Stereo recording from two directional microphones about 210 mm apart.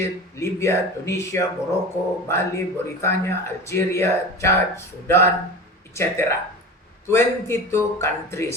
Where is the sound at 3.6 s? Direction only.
10° left (ahead or behind).